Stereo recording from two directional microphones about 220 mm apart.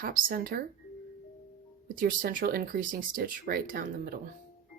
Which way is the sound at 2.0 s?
40° right (ahead or behind).